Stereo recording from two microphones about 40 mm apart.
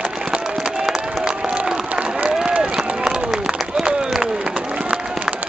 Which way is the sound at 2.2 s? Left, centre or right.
Centre.